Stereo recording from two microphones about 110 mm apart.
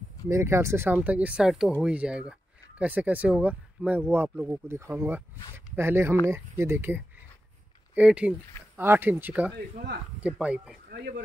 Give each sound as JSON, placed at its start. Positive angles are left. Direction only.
{"t": 0.3, "sound": "speech", "side_deg": -25}